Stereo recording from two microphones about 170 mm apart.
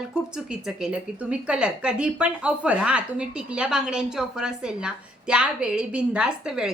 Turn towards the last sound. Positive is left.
turn(degrees=-5)  # may be behind; listen again after turning